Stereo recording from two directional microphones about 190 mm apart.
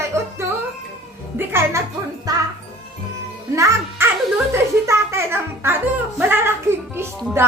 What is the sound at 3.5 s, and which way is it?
Music, 15° right (ahead or behind).